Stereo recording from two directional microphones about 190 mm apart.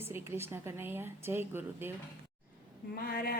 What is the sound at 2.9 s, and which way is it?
Speech, 50° left (ahead or behind).